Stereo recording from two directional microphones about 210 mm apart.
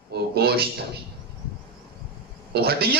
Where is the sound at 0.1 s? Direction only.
50° right (ahead or behind).